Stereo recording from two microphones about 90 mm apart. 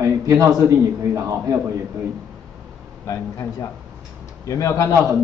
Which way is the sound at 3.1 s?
35° left (ahead or behind).